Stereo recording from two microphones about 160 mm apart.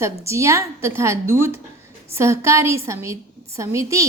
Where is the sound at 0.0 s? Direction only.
20° right (ahead or behind).